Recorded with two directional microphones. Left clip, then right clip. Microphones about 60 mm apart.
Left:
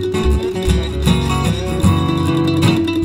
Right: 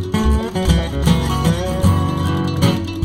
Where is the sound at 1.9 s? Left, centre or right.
Left.